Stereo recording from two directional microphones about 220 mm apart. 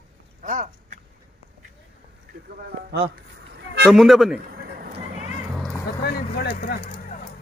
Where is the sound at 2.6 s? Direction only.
50° right (ahead or behind).